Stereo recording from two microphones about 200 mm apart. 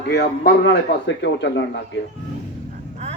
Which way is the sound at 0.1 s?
55° left (ahead or behind).